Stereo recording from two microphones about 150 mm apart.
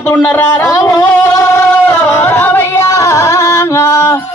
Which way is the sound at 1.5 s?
15° left (ahead or behind).